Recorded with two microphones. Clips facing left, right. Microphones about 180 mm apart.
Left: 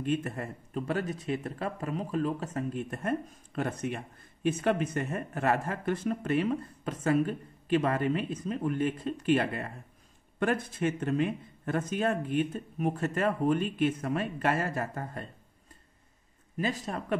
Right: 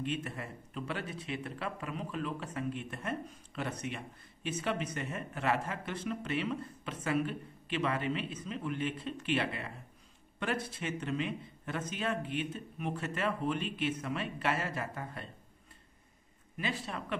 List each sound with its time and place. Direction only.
0.0 s speech: 45° left (ahead or behind)
16.5 s speech: 40° left (ahead or behind)